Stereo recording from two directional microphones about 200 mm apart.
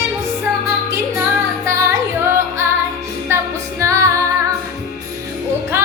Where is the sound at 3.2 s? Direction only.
15° right (ahead or behind).